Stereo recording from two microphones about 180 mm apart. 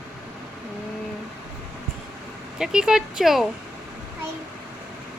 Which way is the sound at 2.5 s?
5° right (ahead or behind).